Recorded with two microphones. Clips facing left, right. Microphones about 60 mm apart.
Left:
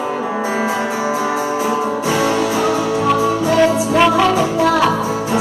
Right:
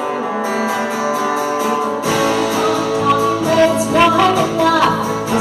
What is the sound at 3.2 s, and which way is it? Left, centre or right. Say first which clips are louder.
Music: even; centre.